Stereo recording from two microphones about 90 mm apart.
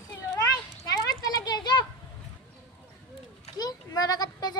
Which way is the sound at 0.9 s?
45° left (ahead or behind).